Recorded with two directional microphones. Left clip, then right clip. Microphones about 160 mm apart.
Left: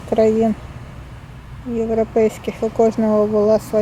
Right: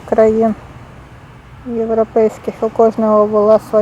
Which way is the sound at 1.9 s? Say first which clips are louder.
Right 4 dB; 40° right (ahead or behind).